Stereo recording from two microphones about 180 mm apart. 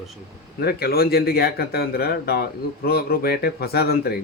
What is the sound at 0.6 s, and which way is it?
Speech, 60° left (ahead or behind).